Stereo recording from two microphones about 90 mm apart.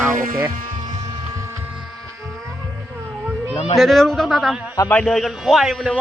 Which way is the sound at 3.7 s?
Centre (ahead or behind).